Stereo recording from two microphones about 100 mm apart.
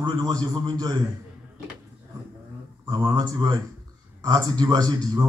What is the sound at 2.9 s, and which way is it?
Speech, 40° right (ahead or behind).